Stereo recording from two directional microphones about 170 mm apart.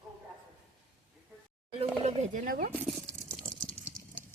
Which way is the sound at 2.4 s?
60° right (ahead or behind).